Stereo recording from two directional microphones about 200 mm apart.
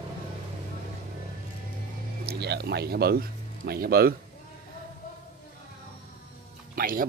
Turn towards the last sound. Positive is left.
turn(degrees=-45)  # may be behind; listen again after turning